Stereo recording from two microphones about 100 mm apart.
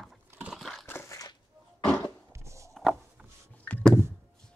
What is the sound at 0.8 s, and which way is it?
Crushing, 20° left (ahead or behind).